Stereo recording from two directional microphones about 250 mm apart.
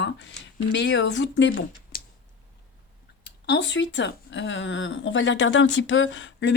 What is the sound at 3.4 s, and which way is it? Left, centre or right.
Speech, left.